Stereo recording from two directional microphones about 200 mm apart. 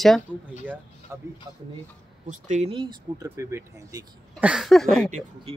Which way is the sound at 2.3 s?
40° right (ahead or behind).